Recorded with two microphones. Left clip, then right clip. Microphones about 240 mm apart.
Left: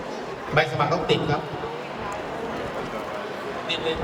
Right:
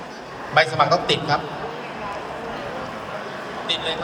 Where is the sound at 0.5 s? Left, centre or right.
Right.